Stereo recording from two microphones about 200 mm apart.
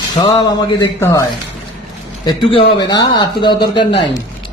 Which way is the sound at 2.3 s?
25° left (ahead or behind).